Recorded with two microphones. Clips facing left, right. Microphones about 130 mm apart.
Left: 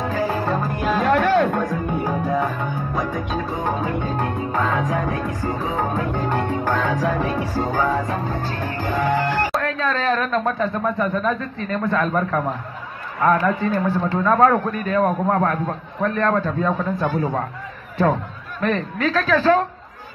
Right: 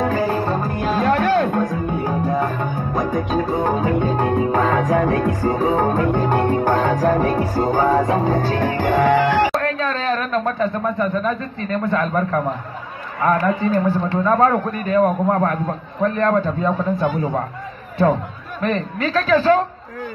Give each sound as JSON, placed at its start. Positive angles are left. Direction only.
{"t": 0.3, "sound": "music", "side_deg": -30}
{"t": 9.5, "sound": "a man's voice", "side_deg": 0}